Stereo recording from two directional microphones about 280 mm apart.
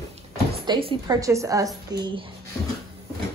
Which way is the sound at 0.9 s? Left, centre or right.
Centre.